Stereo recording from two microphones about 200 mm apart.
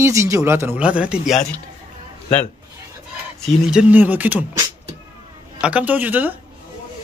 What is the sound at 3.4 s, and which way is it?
A man's voice, 5° right (ahead or behind).